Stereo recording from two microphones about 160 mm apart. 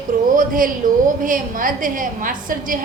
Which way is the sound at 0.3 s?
60° right (ahead or behind).